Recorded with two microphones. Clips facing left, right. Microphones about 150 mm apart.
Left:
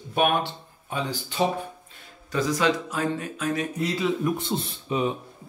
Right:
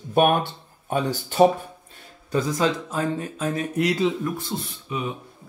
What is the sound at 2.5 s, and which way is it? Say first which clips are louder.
Speech: right 1 dB; 30° right (ahead or behind).